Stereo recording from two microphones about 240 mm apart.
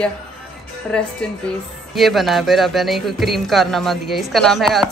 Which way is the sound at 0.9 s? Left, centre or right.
Centre.